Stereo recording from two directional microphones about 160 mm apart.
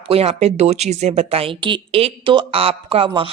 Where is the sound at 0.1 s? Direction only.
40° right (ahead or behind).